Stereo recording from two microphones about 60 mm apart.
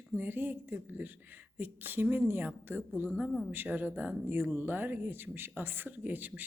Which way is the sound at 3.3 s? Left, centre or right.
Centre.